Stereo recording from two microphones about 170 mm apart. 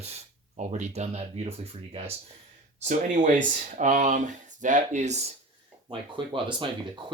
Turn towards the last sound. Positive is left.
turn(degrees=-30)  # may be behind; listen again after turning